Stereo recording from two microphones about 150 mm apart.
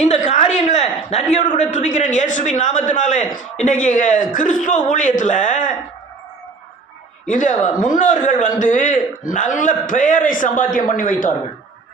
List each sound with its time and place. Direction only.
0.0 s a man's voice: 50° left (ahead or behind)
7.3 s a man's voice: 55° left (ahead or behind)